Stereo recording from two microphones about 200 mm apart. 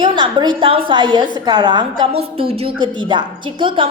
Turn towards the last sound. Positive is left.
turn(degrees=-25)  # may be behind; listen again after turning